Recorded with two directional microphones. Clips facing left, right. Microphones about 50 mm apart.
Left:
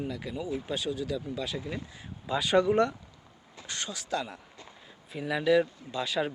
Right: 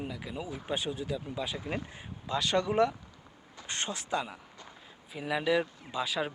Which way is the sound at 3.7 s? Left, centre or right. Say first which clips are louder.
Right 2 dB; right.